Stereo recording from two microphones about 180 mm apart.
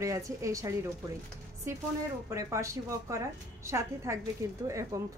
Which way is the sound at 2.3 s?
15° right (ahead or behind).